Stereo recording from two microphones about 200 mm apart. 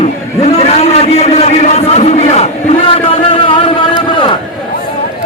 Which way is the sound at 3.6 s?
25° left (ahead or behind).